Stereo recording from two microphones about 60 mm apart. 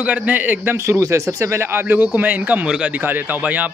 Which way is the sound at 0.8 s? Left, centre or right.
Right.